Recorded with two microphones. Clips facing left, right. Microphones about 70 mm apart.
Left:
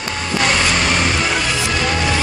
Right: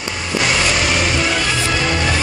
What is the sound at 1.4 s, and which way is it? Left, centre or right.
Music, centre.